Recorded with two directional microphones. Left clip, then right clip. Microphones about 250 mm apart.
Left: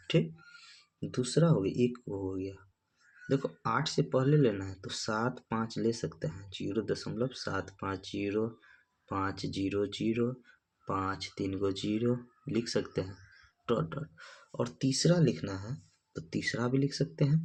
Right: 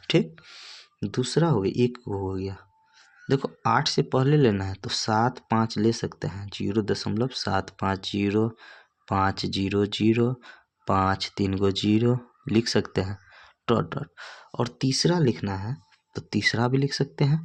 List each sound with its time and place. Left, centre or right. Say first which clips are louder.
0.8 s speech: right 6 dB; right